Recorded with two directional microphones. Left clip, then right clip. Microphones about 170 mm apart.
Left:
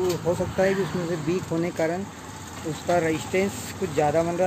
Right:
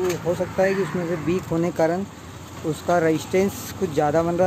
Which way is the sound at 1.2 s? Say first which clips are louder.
Right 4 dB; 20° right (ahead or behind).